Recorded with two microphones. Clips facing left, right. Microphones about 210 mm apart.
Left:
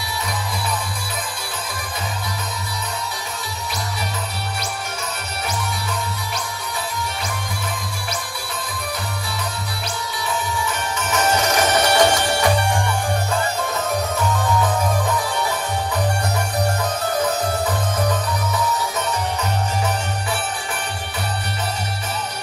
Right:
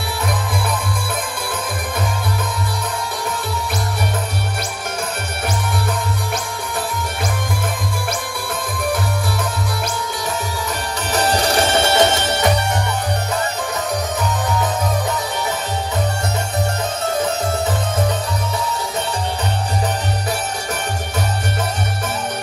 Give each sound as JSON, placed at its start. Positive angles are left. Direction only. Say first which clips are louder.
{"t": 11.0, "sound": "music", "louder": "right 2 dB", "side_deg": -35}